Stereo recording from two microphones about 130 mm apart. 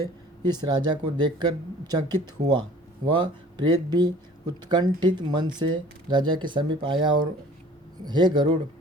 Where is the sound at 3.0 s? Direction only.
35° right (ahead or behind).